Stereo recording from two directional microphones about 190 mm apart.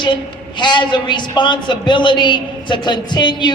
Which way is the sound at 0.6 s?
25° left (ahead or behind).